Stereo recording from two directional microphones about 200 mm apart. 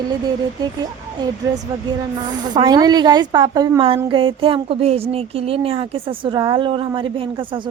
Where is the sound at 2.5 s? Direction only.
20° right (ahead or behind).